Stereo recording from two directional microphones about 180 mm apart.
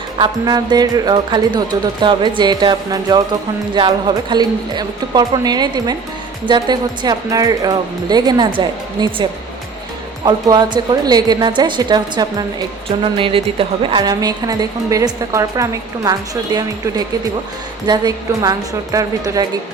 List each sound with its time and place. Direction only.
0.2 s a woman's voice: 25° right (ahead or behind)
10.2 s a woman's voice: 20° right (ahead or behind)